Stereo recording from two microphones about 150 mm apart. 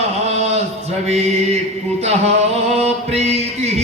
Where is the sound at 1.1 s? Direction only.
45° right (ahead or behind).